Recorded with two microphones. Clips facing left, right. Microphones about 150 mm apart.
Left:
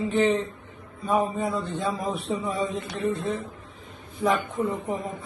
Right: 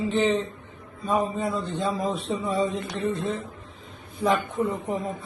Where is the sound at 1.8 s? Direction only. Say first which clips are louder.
Right 2 dB; 25° right (ahead or behind).